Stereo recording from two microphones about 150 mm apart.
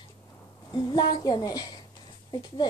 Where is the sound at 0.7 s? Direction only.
30° left (ahead or behind).